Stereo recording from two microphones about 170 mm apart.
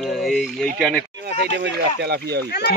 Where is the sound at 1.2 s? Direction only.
75° right (ahead or behind).